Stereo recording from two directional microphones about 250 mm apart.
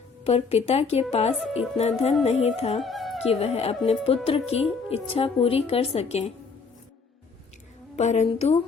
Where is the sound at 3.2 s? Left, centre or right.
Left.